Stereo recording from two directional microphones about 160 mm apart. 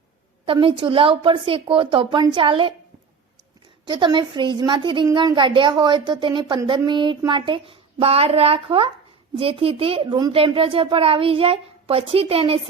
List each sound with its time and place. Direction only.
0.4 s speech: 35° right (ahead or behind)
3.8 s a woman's voice: 30° right (ahead or behind)